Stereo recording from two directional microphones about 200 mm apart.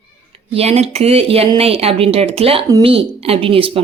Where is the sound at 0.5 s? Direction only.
30° right (ahead or behind).